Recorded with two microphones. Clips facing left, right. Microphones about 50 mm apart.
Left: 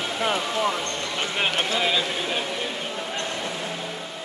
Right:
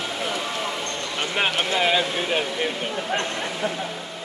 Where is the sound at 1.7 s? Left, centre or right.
Right.